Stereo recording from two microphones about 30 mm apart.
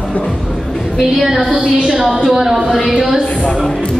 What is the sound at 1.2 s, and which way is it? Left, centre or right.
A woman's voice, centre.